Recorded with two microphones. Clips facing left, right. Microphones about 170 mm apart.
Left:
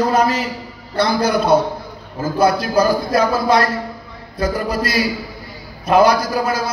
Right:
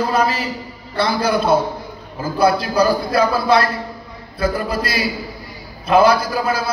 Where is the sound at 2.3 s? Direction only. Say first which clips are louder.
Even; 45° left (ahead or behind).